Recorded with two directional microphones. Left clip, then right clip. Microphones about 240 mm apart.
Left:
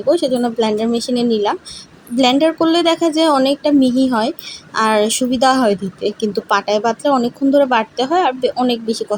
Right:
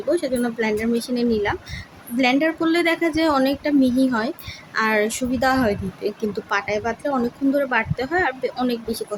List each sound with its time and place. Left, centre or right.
0.1 s speech: centre